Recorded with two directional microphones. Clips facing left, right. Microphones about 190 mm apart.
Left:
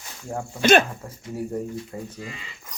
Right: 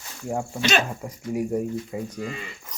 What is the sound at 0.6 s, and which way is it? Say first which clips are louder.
Speech: left 8 dB; 55° left (ahead or behind).